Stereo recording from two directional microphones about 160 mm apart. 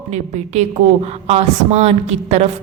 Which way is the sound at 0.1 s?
45° right (ahead or behind).